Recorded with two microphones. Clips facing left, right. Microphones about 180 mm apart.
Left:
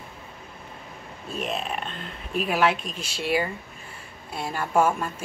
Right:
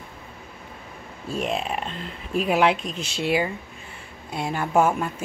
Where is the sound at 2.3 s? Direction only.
20° right (ahead or behind).